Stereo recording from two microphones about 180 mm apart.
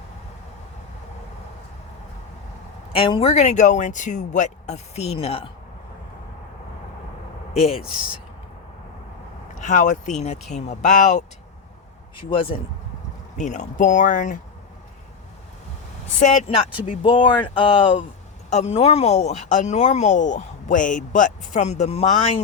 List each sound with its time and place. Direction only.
2.9 s speech: 30° left (ahead or behind)
7.5 s speech: 35° left (ahead or behind)
9.6 s speech: 45° left (ahead or behind)
12.1 s speech: 30° left (ahead or behind)
13.3 s speech: 40° left (ahead or behind)
16.2 s speech: 40° left (ahead or behind)